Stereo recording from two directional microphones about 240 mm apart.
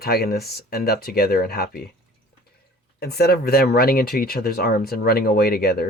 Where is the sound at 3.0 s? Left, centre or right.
Left.